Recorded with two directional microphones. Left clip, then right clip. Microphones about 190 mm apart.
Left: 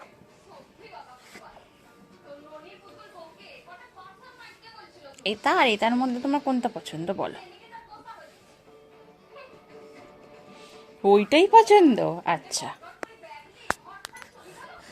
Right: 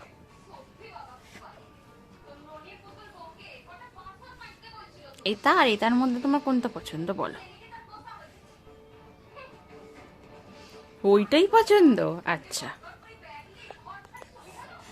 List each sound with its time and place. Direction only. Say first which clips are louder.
5.2 s a woman's voice: even; 20° right (ahead or behind)
10.5 s speech: left 1 dB; 15° right (ahead or behind)